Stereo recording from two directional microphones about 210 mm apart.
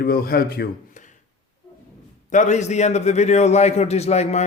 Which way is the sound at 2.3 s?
35° left (ahead or behind).